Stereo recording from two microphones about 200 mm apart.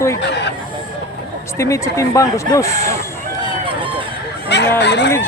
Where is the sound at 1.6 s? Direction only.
15° left (ahead or behind).